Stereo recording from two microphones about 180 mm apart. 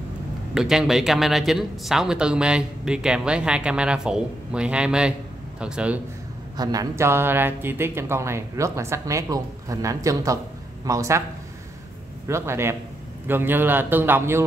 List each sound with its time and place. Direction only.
0.6 s speech: 5° right (ahead or behind)
6.5 s speech: 20° right (ahead or behind)
12.3 s speech: 15° right (ahead or behind)